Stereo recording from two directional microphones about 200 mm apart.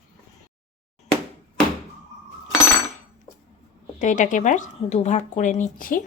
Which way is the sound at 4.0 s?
40° left (ahead or behind).